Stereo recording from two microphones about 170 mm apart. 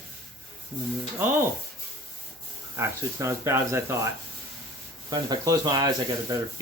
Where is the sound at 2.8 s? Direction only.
15° right (ahead or behind).